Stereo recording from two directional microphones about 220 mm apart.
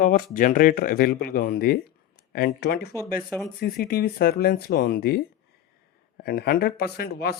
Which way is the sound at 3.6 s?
40° left (ahead or behind).